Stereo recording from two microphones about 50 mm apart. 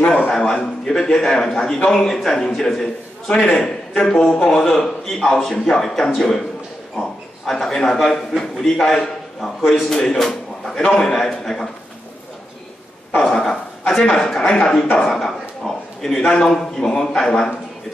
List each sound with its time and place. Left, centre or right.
0.3 s a man's voice: centre
13.3 s a man's voice: centre
15.0 s a man's voice: centre